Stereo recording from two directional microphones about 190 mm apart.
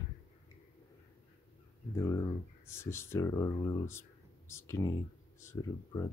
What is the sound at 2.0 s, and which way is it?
Speech, 15° left (ahead or behind).